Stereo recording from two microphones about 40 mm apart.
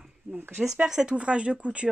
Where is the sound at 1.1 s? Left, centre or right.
Right.